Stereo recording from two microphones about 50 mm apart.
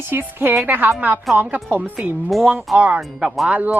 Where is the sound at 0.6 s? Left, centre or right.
Right.